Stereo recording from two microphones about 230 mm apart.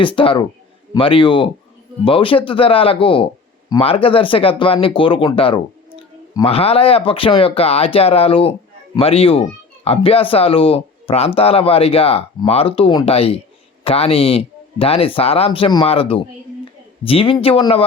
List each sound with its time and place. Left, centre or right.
0.0 s speech: left